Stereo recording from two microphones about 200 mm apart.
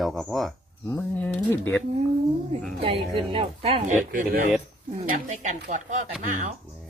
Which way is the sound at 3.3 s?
25° right (ahead or behind).